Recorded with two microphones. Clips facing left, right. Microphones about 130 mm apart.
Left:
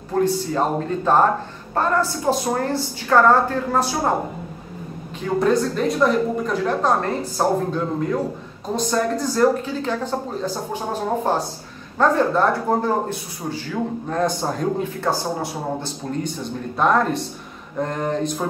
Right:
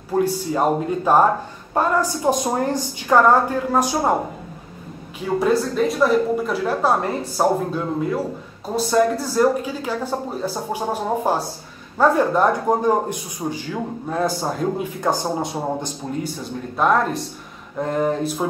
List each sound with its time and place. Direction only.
0.1 s speech: 10° right (ahead or behind)
5.2 s a woman's voice: 5° right (ahead or behind)
14.0 s a woman's voice: 5° right (ahead or behind)
15.0 s speech: 15° right (ahead or behind)
16.7 s a woman's voice: centre (ahead or behind)